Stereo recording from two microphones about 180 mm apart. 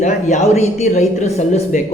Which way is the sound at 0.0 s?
40° left (ahead or behind).